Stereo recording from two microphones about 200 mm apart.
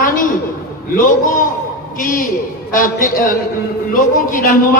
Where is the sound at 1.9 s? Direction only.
40° left (ahead or behind).